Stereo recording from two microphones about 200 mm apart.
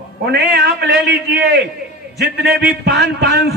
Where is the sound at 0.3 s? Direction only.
55° right (ahead or behind).